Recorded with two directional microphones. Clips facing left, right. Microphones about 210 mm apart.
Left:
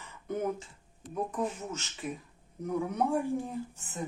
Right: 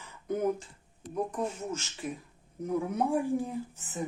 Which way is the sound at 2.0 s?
Centre (ahead or behind).